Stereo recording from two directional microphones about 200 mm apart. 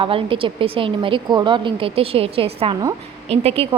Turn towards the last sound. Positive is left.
turn(degrees=-30)  # may be behind; listen again after turning